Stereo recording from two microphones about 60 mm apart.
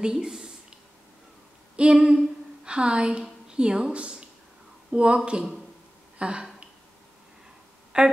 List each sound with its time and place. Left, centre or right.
0.0 s a sound: centre
1.8 s a woman's voice: centre
7.9 s speech: centre